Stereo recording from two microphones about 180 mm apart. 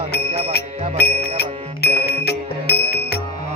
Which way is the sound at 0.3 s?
35° right (ahead or behind).